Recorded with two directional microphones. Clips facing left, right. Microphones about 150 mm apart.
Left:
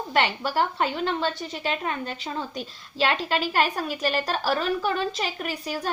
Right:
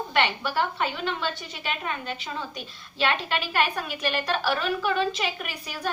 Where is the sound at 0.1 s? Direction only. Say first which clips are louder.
Left 2 dB; 40° left (ahead or behind).